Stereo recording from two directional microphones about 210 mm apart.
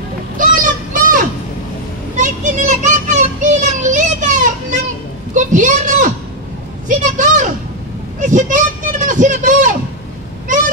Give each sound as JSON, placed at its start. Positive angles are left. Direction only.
{"t": 0.4, "sound": "children playing", "side_deg": -40}
{"t": 2.1, "sound": "child singing", "side_deg": -35}
{"t": 5.3, "sound": "a sound", "side_deg": -35}